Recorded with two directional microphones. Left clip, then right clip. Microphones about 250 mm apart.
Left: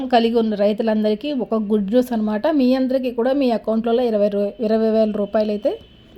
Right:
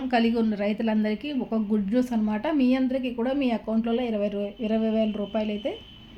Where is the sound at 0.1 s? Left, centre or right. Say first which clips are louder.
Left 8 dB; left.